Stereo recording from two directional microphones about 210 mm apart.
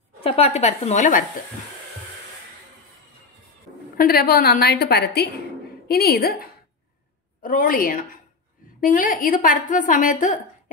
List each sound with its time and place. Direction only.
0.2 s a woman's voice: 30° left (ahead or behind)
3.9 s a woman's voice: 45° left (ahead or behind)